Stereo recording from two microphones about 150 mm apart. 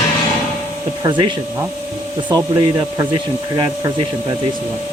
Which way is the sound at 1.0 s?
30° right (ahead or behind).